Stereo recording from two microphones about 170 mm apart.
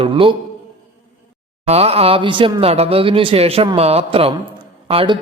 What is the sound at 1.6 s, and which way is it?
Speech, 35° right (ahead or behind).